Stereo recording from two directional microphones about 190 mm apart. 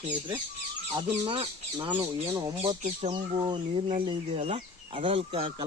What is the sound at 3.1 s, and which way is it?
Speech, 25° right (ahead or behind).